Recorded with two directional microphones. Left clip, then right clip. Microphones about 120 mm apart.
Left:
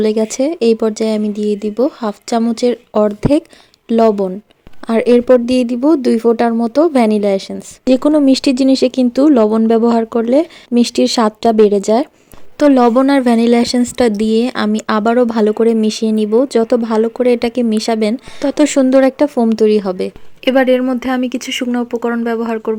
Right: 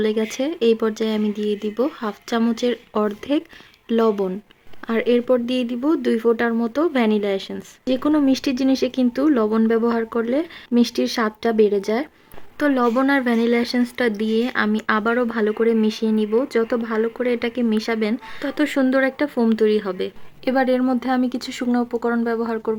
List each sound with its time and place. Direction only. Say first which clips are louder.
0.0 s speech: left 7 dB; 35° left (ahead or behind)
4.9 s a woman's voice: left 9 dB; 50° left (ahead or behind)